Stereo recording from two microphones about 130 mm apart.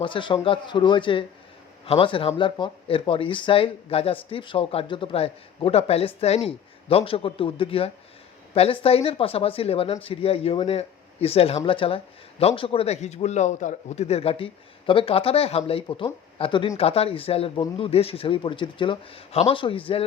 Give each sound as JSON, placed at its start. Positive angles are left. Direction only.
{"t": 0.0, "sound": "a man's voice", "side_deg": 40}